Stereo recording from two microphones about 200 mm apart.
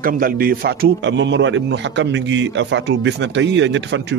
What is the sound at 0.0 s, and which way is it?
A man's voice, 45° right (ahead or behind).